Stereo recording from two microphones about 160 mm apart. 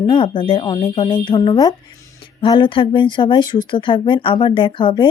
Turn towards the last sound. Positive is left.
turn(degrees=30)  # may be behind; listen again after turning